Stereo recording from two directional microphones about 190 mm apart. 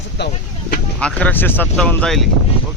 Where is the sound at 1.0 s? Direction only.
5° left (ahead or behind).